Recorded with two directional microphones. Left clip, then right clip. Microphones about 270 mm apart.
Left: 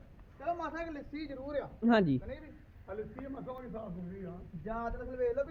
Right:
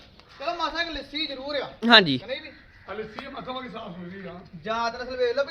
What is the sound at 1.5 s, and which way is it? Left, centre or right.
Speech, centre.